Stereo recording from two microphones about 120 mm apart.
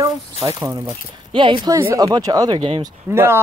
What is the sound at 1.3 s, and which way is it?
Speech, 45° right (ahead or behind).